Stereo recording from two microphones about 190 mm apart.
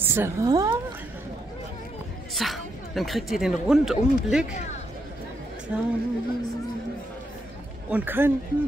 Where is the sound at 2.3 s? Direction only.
Centre (ahead or behind).